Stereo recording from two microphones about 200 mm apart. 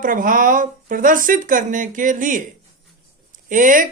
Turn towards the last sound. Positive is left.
turn(degrees=-40)  # may be behind; listen again after turning